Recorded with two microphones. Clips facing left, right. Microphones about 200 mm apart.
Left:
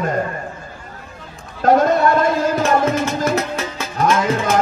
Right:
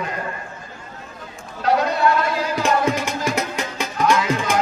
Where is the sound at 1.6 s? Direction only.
45° left (ahead or behind).